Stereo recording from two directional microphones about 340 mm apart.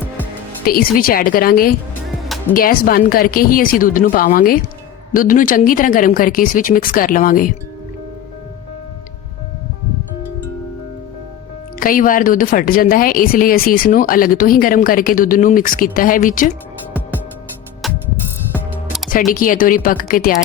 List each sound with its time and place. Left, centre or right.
0.6 s speech: left
11.8 s speech: left
17.8 s music: centre
19.3 s speech: left